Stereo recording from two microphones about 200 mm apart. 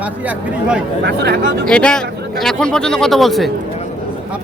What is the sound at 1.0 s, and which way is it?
Speech, 55° right (ahead or behind).